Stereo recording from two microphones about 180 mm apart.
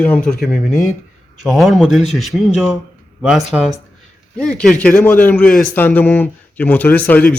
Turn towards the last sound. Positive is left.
turn(degrees=10)  # may be behind; listen again after turning